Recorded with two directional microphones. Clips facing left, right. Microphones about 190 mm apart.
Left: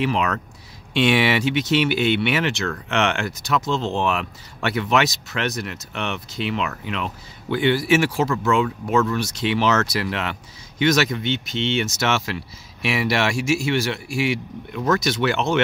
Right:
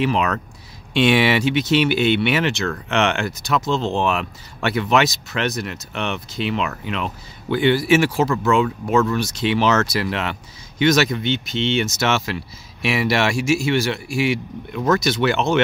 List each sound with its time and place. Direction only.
0.0 s speech: 35° right (ahead or behind)